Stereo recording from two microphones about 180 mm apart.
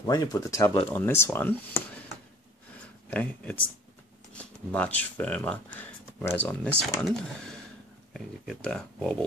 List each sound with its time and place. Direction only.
0.0 s speech: 20° left (ahead or behind)
3.1 s speech: 10° left (ahead or behind)